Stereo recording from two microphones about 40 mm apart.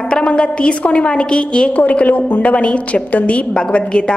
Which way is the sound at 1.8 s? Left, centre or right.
Left.